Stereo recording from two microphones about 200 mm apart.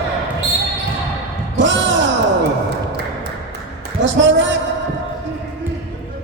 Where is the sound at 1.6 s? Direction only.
65° right (ahead or behind).